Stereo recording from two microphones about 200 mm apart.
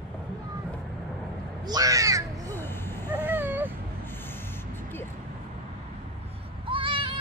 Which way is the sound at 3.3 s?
10° right (ahead or behind).